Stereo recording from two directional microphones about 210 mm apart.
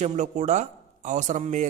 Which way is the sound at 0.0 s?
35° right (ahead or behind).